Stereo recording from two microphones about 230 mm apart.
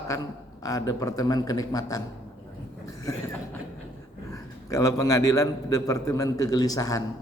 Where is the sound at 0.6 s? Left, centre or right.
Centre.